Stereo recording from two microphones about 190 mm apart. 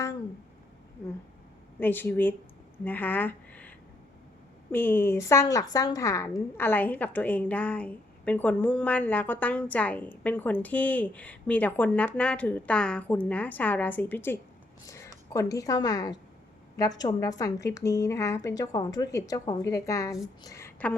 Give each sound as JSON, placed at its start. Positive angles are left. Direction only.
{"t": 1.8, "sound": "a woman's voice", "side_deg": 10}